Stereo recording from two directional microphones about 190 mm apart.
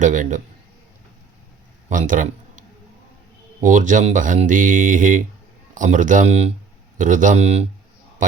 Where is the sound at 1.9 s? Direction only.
45° right (ahead or behind).